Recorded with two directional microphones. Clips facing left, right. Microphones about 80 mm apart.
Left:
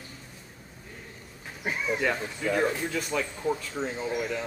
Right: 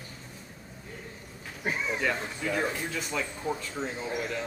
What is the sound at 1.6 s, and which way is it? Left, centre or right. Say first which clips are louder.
Speech: left 2 dB; centre.